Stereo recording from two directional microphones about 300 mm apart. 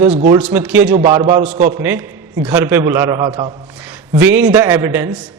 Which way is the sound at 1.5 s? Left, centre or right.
Right.